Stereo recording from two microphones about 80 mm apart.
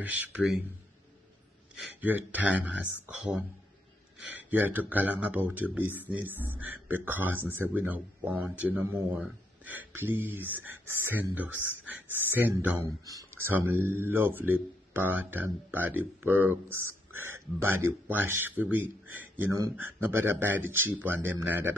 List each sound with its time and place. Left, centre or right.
0.0 s speech: centre
2.0 s speech: right
12.8 s speech: right
13.3 s speech: right